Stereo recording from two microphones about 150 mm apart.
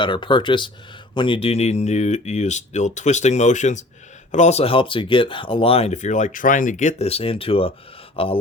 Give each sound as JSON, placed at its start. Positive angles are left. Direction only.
{"t": 0.0, "sound": "speech", "side_deg": 30}